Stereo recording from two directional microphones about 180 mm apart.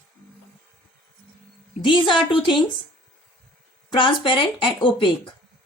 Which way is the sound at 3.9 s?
25° left (ahead or behind).